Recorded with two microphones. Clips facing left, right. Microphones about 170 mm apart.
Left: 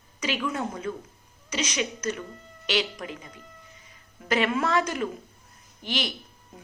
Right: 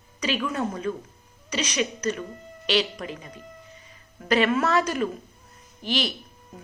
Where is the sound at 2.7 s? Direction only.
15° left (ahead or behind).